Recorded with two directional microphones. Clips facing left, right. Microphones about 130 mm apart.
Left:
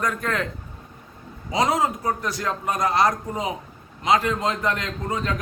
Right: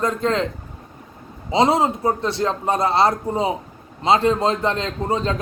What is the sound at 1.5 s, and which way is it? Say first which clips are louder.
Speech: right 5 dB; 25° right (ahead or behind).